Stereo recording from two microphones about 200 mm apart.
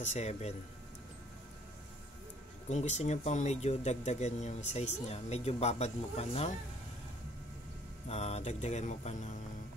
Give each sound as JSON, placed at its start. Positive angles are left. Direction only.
{"t": 0.0, "sound": "speech", "side_deg": 35}
{"t": 2.7, "sound": "speech", "side_deg": 35}
{"t": 8.1, "sound": "speech", "side_deg": 30}